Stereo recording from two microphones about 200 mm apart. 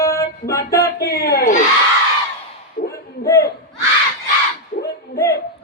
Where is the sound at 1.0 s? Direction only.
55° left (ahead or behind).